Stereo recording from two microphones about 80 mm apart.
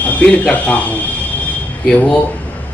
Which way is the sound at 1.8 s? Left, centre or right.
Centre.